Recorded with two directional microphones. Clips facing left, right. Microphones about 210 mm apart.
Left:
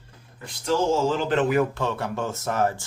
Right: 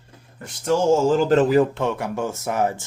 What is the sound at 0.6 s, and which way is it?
Speech, 45° right (ahead or behind).